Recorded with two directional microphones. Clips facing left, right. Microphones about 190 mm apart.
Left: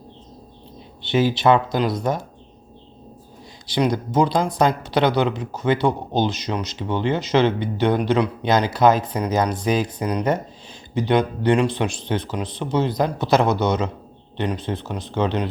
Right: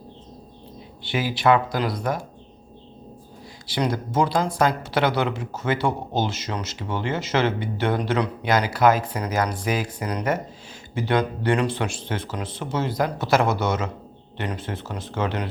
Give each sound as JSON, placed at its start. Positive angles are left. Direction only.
{"t": 1.0, "sound": "speech", "side_deg": 25}
{"t": 3.8, "sound": "speech", "side_deg": 15}